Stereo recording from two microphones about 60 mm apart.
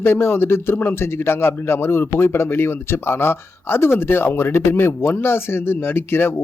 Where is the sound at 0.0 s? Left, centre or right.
Left.